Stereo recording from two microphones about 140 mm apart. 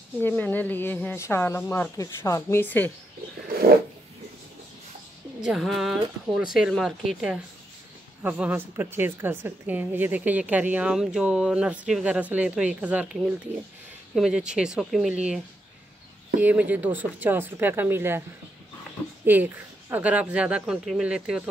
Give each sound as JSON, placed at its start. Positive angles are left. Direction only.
{"t": 0.2, "sound": "speech", "side_deg": 15}
{"t": 3.4, "sound": "a sound", "side_deg": -90}
{"t": 5.4, "sound": "a woman's voice", "side_deg": -5}
{"t": 19.2, "sound": "a woman's voice", "side_deg": -15}